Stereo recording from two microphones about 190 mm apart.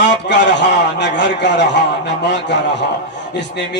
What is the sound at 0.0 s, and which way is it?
Speech, 65° left (ahead or behind).